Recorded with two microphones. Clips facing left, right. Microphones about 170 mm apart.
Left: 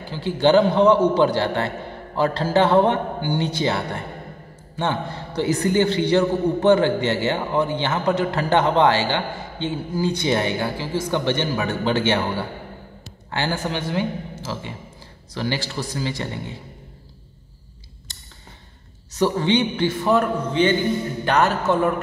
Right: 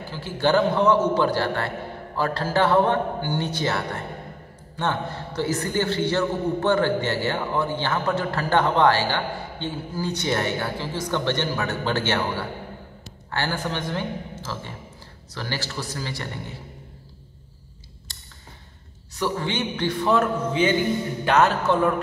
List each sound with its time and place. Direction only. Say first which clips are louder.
0.1 s a man's voice: left 5 dB; 20° left (ahead or behind)
19.1 s speech: left 7 dB; 25° left (ahead or behind)
19.8 s a man's voice: left 2 dB; 5° left (ahead or behind)